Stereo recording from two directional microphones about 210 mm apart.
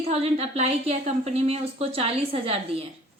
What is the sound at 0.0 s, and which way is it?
A woman's voice, 30° right (ahead or behind).